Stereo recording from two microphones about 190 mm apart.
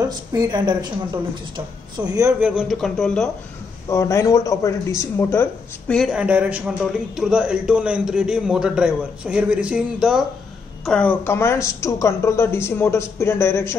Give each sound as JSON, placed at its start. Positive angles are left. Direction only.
{"t": 0.3, "sound": "speech", "side_deg": -20}
{"t": 2.0, "sound": "a man's voice", "side_deg": -15}
{"t": 2.5, "sound": "speech", "side_deg": 0}
{"t": 3.9, "sound": "speech", "side_deg": 15}
{"t": 10.9, "sound": "a woman's voice", "side_deg": 10}